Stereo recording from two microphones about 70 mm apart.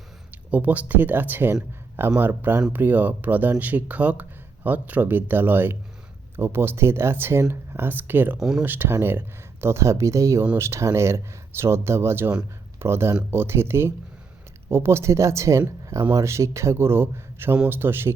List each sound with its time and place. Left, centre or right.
0.5 s speech: right
8.4 s speech: centre
8.6 s speech: right